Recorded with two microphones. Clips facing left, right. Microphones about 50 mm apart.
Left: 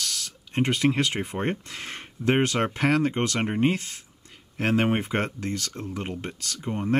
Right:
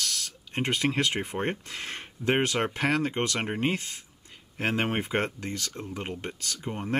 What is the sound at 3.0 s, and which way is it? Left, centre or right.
Speech, centre.